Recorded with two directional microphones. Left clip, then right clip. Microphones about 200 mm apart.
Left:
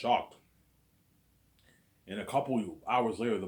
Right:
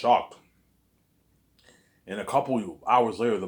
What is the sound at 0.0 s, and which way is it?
Speech, 20° right (ahead or behind).